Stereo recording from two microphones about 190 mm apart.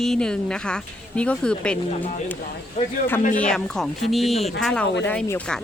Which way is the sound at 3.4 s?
5° left (ahead or behind).